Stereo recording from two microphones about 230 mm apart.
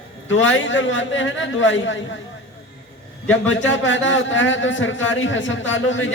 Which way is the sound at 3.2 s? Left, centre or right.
Left.